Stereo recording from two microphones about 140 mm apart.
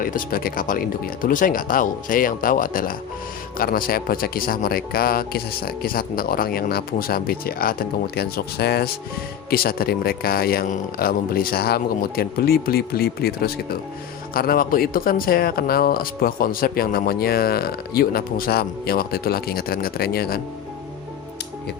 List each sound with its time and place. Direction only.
0.0 s speech: 90° left
9.5 s speech: 90° left